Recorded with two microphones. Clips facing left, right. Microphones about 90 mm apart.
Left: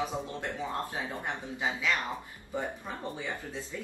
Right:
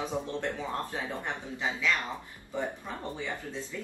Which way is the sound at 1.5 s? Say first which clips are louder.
Right 1 dB; 15° left (ahead or behind).